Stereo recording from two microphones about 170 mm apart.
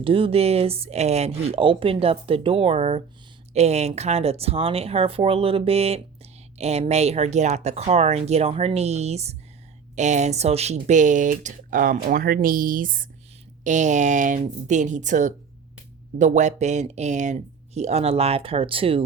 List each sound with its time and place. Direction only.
0.0 s speech: 30° right (ahead or behind)